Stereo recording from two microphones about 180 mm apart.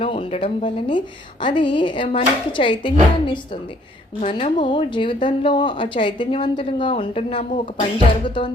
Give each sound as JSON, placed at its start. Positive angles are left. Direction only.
{"t": 0.0, "sound": "speech", "side_deg": 30}